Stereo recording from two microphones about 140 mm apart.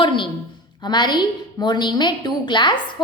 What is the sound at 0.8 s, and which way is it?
A woman's voice, 30° left (ahead or behind).